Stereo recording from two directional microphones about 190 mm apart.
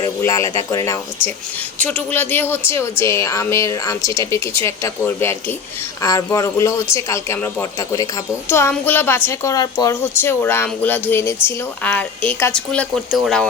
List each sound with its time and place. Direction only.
0.0 s a woman's voice: 15° left (ahead or behind)
1.8 s a woman's voice: 5° left (ahead or behind)